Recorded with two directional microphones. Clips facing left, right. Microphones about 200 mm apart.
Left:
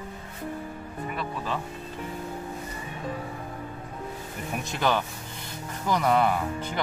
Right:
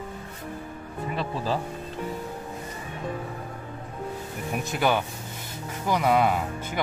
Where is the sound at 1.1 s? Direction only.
30° right (ahead or behind).